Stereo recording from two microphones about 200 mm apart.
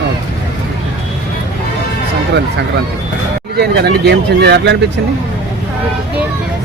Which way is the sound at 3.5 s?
55° right (ahead or behind).